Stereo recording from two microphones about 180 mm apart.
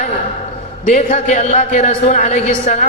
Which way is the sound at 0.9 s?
40° left (ahead or behind).